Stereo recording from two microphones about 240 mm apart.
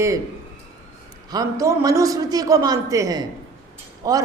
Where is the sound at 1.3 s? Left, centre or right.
Centre.